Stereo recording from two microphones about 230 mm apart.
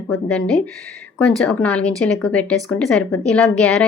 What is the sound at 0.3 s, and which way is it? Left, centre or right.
A woman's voice, centre.